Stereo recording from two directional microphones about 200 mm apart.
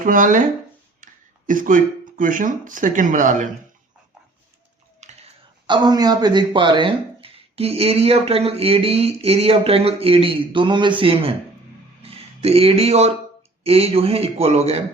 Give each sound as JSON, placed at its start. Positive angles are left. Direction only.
{"t": 0.0, "sound": "speech", "side_deg": -40}
{"t": 4.9, "sound": "whispering", "side_deg": -35}
{"t": 5.6, "sound": "speech", "side_deg": -20}